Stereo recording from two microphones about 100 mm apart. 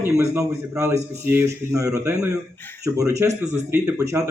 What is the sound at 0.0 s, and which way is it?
A man's voice, 30° right (ahead or behind).